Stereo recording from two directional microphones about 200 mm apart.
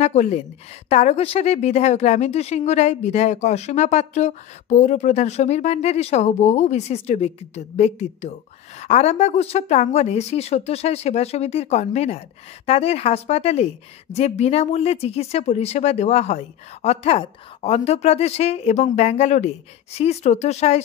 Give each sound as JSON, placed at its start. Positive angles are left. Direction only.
{"t": 0.0, "sound": "speech", "side_deg": 35}